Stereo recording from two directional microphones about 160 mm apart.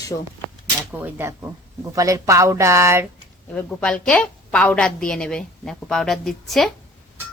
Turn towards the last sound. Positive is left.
turn(degrees=0)  # may be behind; listen again after turning